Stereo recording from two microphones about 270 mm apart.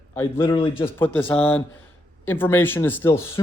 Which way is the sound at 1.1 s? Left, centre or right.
Centre.